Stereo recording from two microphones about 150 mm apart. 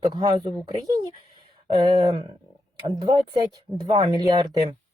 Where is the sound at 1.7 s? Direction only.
30° right (ahead or behind).